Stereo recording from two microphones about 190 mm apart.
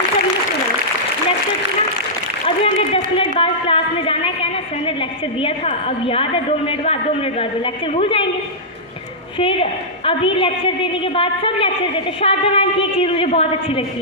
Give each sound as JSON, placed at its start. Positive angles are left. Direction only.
{"t": 2.7, "sound": "a sound", "side_deg": 30}
{"t": 5.4, "sound": "a woman's voice", "side_deg": 30}
{"t": 9.4, "sound": "a woman's voice", "side_deg": 30}